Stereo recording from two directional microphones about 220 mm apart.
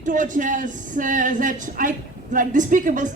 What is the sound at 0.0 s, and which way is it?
Speech, 35° right (ahead or behind).